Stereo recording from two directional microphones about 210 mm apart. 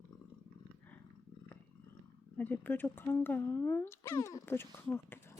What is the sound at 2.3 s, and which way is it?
Speech, 10° left (ahead or behind).